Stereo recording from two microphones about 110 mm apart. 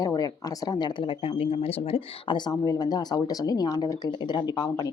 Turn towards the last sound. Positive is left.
turn(degrees=35)  # may be behind; listen again after turning